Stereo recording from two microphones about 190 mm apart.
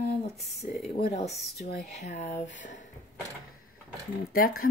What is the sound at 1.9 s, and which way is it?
Speech, 35° left (ahead or behind).